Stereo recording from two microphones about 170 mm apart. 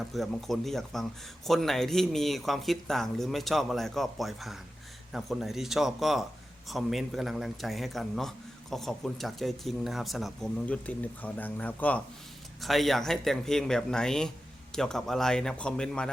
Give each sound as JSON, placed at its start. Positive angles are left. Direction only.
{"t": 0.0, "sound": "speech", "side_deg": 0}